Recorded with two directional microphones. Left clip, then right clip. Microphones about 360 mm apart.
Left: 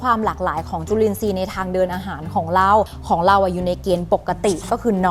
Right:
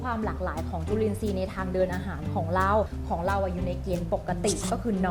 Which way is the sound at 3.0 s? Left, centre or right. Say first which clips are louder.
Left 13 dB; left.